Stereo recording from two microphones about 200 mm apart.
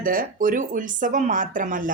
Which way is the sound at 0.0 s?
45° right (ahead or behind).